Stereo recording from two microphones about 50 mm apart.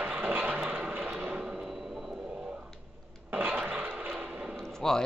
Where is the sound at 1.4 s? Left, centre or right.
Centre.